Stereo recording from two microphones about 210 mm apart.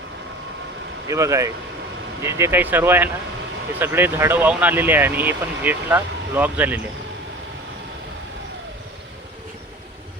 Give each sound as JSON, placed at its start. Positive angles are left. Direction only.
{"t": 1.0, "sound": "speech", "side_deg": -15}